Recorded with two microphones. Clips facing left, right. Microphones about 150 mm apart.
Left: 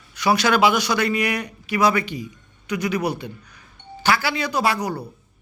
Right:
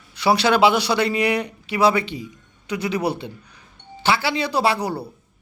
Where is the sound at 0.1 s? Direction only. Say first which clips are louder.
Right 1 dB; 30° right (ahead or behind).